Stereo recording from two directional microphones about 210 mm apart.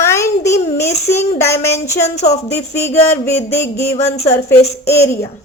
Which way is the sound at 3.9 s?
30° left (ahead or behind).